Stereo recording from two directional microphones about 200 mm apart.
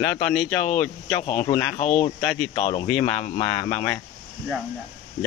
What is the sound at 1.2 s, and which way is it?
Speech, 35° left (ahead or behind).